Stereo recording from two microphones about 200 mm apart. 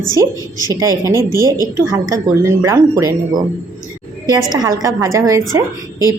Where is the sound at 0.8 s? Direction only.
15° right (ahead or behind).